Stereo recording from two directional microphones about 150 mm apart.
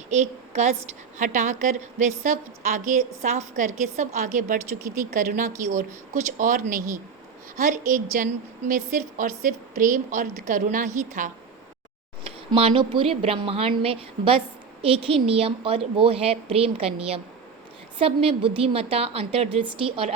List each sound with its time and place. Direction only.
0.1 s a woman's voice: 50° right (ahead or behind)
6.4 s a woman's voice: 65° right (ahead or behind)
12.5 s a woman's voice: 35° right (ahead or behind)